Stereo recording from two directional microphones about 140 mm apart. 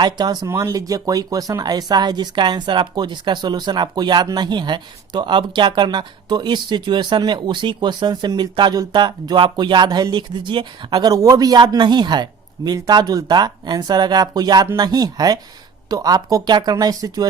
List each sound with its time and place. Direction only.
0.0 s speech: 30° right (ahead or behind)